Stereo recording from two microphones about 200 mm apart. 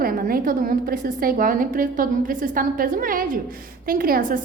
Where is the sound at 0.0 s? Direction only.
45° right (ahead or behind).